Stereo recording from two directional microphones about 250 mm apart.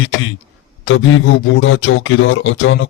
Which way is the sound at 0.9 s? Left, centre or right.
Left.